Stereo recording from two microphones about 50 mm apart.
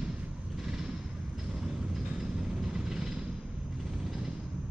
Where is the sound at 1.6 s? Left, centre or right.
Centre.